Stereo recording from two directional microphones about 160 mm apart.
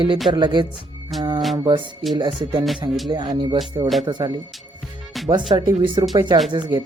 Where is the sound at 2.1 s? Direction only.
30° right (ahead or behind).